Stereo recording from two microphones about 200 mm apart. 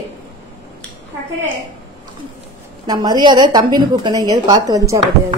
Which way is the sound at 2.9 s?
20° right (ahead or behind).